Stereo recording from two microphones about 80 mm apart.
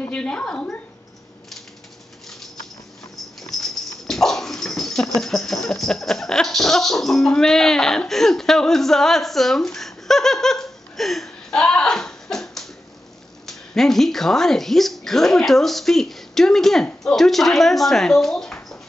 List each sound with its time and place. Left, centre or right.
0.1 s a woman's voice: centre
3.5 s speech: centre